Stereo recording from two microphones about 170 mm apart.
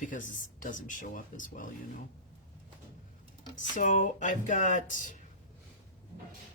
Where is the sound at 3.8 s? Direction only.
50° left (ahead or behind).